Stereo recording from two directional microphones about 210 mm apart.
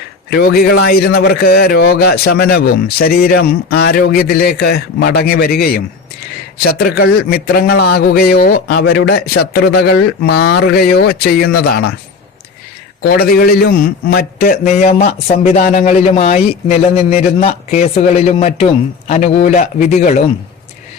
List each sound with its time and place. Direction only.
0.3 s a man's voice: 45° left (ahead or behind)
13.0 s speech: 45° left (ahead or behind)